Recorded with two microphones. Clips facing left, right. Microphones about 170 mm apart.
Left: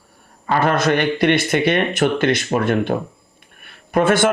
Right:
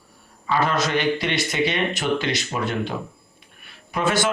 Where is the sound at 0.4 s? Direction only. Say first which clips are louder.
Left 5 dB; 55° left (ahead or behind).